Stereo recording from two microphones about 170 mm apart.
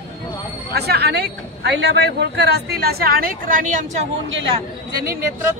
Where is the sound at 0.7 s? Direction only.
70° right (ahead or behind); by 4.1 s 45° right (ahead or behind).